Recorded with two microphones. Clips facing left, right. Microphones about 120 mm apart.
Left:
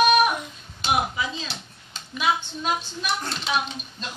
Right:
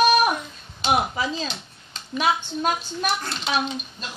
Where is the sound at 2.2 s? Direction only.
55° right (ahead or behind).